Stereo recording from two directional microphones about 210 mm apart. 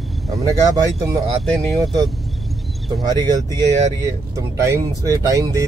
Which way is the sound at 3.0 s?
20° right (ahead or behind).